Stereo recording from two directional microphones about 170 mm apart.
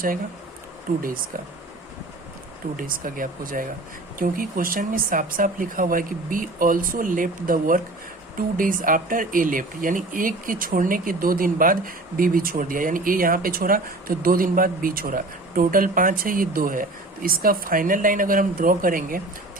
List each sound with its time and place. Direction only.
0.9 s speech: 60° right (ahead or behind)
2.7 s a woman's voice: 55° right (ahead or behind)